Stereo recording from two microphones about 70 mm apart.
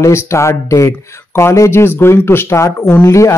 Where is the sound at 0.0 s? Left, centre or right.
Left.